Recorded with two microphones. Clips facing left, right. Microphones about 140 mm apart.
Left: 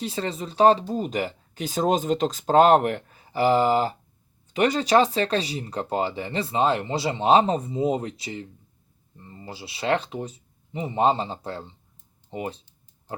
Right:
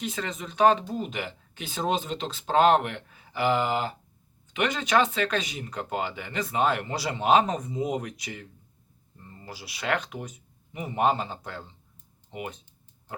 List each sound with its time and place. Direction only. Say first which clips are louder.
0.0 s speech: left 4 dB; 30° left (ahead or behind)